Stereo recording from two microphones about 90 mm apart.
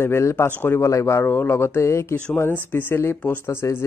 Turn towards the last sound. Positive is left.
turn(degrees=30)  # may be behind; listen again after turning